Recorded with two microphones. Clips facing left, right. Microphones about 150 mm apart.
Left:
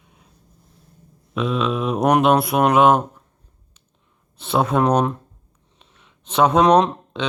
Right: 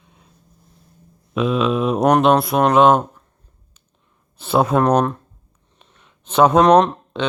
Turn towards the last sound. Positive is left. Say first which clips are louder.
# right 3 dB
turn(degrees=0)  # may be behind; listen again after turning